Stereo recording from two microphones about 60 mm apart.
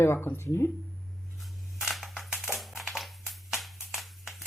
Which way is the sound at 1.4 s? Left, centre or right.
Centre.